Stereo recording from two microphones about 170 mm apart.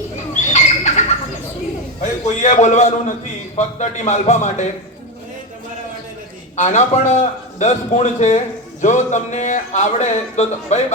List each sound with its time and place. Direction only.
0.3 s bird: 45° left (ahead or behind)
2.4 s a man's voice: 45° left (ahead or behind)
6.6 s a man's voice: 40° left (ahead or behind)